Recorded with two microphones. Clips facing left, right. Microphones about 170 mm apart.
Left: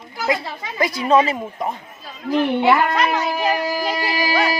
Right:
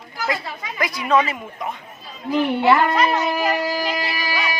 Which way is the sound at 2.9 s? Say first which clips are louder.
Right 1 dB; centre (ahead or behind).